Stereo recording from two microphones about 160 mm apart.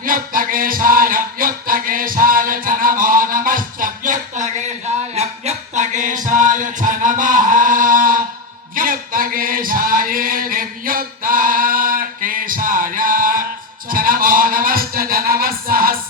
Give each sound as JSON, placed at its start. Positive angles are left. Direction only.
{"t": 0.0, "sound": "music", "side_deg": -60}